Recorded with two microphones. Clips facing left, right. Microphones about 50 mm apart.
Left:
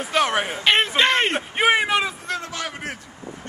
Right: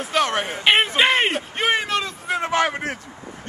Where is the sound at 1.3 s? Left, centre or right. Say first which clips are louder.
Left 2 dB; centre.